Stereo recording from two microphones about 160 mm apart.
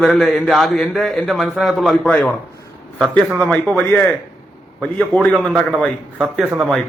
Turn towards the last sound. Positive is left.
turn(degrees=0)  # may be behind; listen again after turning